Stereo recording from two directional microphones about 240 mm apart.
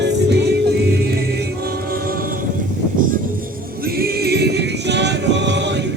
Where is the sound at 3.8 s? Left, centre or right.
Right.